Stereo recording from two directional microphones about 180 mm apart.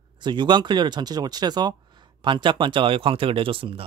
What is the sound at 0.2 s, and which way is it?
Speech, 25° right (ahead or behind).